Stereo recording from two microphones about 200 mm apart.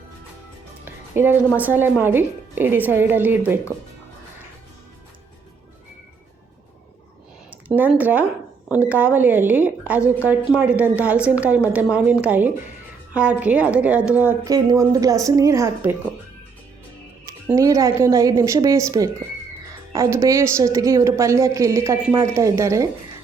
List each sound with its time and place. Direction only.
0.9 s music: 10° right (ahead or behind)
1.5 s a woman's voice: 10° right (ahead or behind)
7.7 s a woman's voice: 10° right (ahead or behind)
17.2 s a woman's voice: 15° right (ahead or behind)